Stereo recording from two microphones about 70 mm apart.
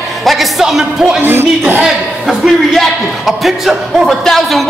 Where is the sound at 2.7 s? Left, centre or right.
Centre.